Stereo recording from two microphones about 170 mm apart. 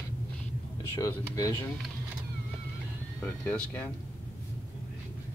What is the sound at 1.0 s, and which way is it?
Speech, 20° left (ahead or behind).